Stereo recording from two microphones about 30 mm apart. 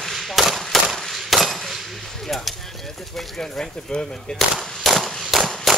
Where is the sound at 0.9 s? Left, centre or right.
Centre.